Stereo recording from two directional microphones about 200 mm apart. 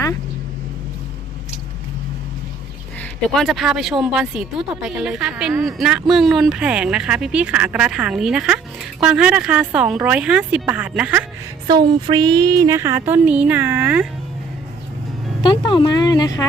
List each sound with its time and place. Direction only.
3.0 s speech: 5° left (ahead or behind)
11.9 s a sound: 20° right (ahead or behind)
15.4 s speech: 25° left (ahead or behind)